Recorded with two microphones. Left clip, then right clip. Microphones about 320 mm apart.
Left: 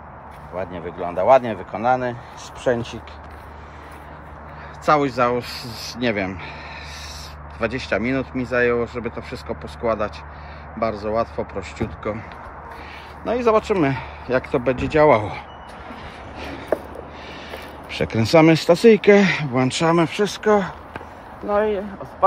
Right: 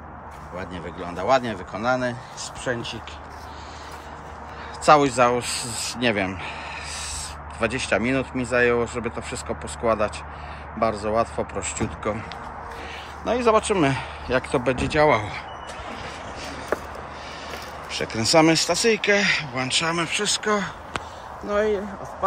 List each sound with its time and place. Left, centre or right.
0.6 s speech: centre
4.8 s speech: centre
7.6 s speech: centre
13.2 s speech: centre
16.3 s a sound: left
17.5 s speech: left; by 20.7 s centre